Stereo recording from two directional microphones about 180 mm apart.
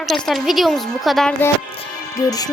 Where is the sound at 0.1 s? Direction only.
Centre (ahead or behind).